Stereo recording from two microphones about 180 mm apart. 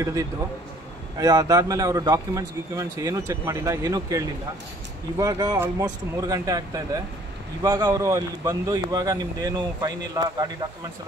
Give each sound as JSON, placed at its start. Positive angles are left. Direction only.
{"t": 0.0, "sound": "a man's voice", "side_deg": -20}